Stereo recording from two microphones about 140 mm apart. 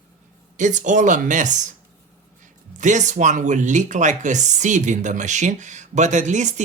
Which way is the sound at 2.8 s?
60° right (ahead or behind).